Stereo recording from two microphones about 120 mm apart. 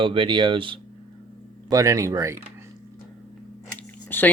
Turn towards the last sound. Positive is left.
turn(degrees=15)  # may be behind; listen again after turning